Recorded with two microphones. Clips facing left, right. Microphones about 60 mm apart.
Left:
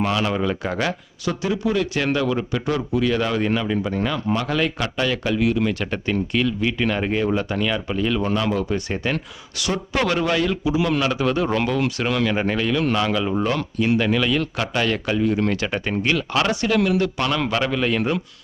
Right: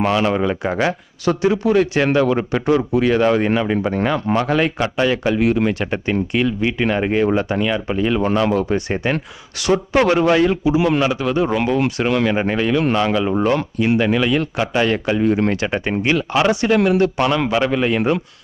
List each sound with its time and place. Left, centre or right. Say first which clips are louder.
0.0 s speech: right 4 dB; right
1.4 s speech: right 6 dB; right
2.6 s speech: right 7 dB; centre
3.0 s speech: right 6 dB; right
7.6 s speech: right 3 dB; centre
8.2 s speech: right 5 dB; right; by 11.7 s centre
11.7 s speech: right 4 dB; right
15.2 s speech: right 3 dB; right
16.7 s speech: right 3 dB; right
17.2 s speech: right 5 dB; centre